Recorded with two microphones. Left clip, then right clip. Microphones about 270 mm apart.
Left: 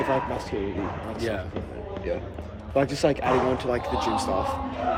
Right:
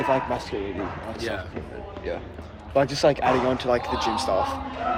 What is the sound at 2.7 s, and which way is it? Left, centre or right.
A man's voice, centre.